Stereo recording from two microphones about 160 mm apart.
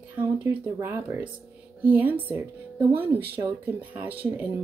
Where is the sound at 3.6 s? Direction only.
10° right (ahead or behind).